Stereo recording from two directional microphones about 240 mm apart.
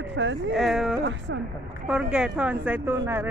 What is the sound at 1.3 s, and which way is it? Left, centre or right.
Speech, right.